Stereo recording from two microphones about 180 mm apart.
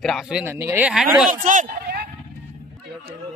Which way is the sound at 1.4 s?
45° right (ahead or behind).